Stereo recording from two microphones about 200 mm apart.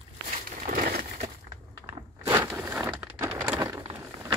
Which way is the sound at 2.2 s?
10° right (ahead or behind).